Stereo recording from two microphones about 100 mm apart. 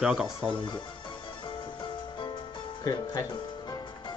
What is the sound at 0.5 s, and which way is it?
Music, 55° left (ahead or behind).